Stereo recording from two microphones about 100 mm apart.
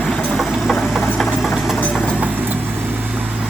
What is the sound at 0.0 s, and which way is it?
Vehicle, centre (ahead or behind).